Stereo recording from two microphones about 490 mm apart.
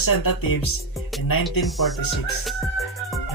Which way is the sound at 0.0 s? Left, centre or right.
Left.